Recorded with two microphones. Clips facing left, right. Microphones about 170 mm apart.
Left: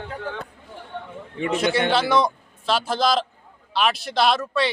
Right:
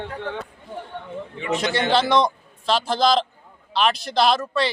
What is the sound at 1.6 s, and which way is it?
A man's voice, 5° left (ahead or behind).